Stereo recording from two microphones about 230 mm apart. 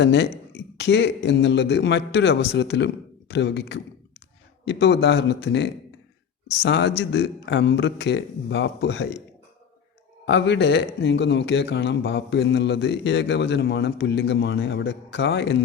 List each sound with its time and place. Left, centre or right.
0.0 s speech: left
10.2 s speech: left